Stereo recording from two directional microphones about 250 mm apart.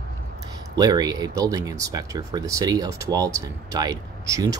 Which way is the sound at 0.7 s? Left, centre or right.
Centre.